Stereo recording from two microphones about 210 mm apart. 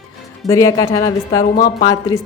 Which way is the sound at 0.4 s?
15° left (ahead or behind).